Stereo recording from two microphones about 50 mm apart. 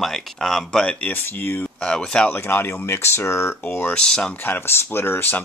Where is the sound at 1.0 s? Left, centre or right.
Left.